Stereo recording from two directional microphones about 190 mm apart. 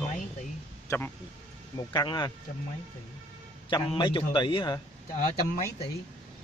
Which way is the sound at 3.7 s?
25° left (ahead or behind).